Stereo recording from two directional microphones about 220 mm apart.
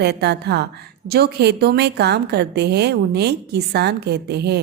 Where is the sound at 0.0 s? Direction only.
50° right (ahead or behind).